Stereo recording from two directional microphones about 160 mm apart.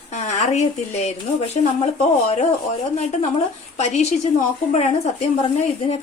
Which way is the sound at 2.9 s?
45° left (ahead or behind).